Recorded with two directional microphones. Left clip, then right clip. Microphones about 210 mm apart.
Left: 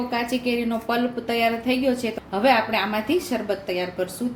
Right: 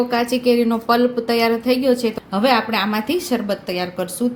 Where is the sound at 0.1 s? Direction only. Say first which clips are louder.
Right 7 dB; 40° right (ahead or behind).